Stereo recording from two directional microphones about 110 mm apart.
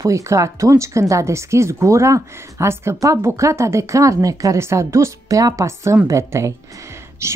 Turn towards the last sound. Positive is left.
turn(degrees=-25)  # may be behind; listen again after turning